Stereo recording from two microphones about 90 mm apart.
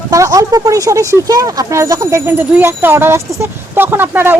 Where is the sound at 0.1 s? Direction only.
40° right (ahead or behind).